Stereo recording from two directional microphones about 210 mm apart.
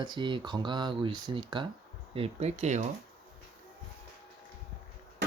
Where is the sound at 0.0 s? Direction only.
20° right (ahead or behind).